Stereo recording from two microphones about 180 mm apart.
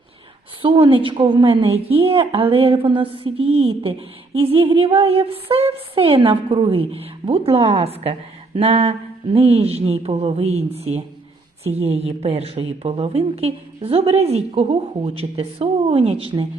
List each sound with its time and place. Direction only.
0.6 s a woman's voice: 30° right (ahead or behind)